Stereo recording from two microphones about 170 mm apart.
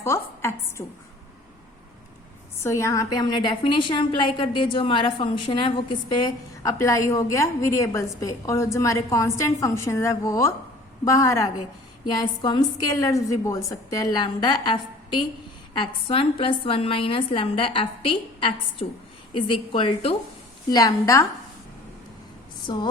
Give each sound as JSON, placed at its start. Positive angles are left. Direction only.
{"t": 0.0, "sound": "a woman's voice", "side_deg": 15}
{"t": 2.6, "sound": "a woman's voice", "side_deg": 15}
{"t": 20.7, "sound": "a woman's voice", "side_deg": 20}
{"t": 22.6, "sound": "a woman's voice", "side_deg": 25}